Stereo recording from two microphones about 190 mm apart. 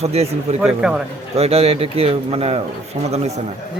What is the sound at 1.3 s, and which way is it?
Speech, 30° right (ahead or behind).